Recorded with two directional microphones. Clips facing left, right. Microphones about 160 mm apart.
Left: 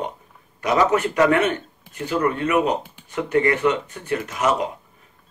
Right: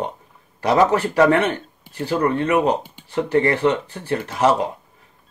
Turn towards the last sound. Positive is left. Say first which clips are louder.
# right 3 dB
turn(degrees=-30)  # may be behind; listen again after turning